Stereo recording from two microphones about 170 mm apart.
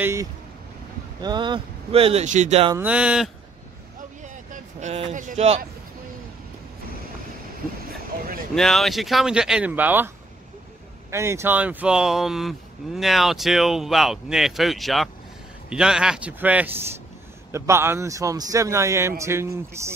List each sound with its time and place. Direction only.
0.0 s a man's voice: 15° right (ahead or behind)
1.2 s speech: 25° right (ahead or behind)
2.8 s speech: 5° right (ahead or behind)
4.7 s speech: 40° right (ahead or behind)
8.5 s a man's voice: centre (ahead or behind); by 19.9 s 15° right (ahead or behind)